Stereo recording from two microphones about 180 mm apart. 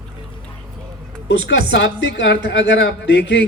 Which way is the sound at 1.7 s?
85° left.